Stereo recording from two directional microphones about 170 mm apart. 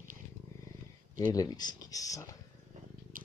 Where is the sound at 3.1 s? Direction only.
55° right (ahead or behind).